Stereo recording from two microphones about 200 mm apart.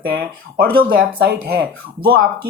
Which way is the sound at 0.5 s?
50° right (ahead or behind).